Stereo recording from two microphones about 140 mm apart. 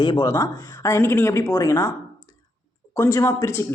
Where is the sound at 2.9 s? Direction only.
20° left (ahead or behind).